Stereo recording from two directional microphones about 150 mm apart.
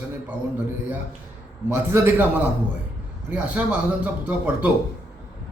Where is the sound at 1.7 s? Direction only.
15° right (ahead or behind).